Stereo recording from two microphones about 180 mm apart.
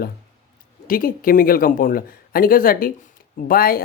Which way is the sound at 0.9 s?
50° left (ahead or behind).